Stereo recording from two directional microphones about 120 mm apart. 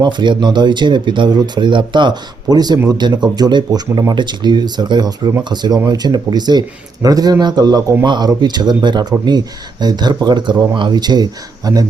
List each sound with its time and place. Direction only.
0.0 s speech: 40° right (ahead or behind)